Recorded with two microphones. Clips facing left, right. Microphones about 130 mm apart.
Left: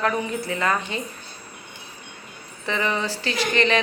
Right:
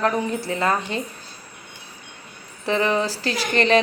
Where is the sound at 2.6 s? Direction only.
40° right (ahead or behind).